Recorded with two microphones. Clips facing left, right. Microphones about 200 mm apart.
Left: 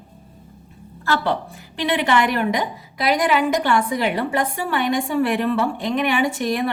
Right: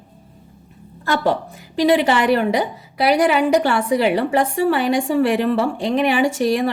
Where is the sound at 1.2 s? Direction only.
40° right (ahead or behind).